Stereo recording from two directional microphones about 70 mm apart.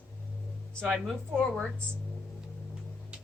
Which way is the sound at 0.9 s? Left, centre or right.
Centre.